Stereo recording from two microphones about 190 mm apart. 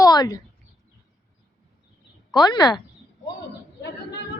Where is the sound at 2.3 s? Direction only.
20° left (ahead or behind).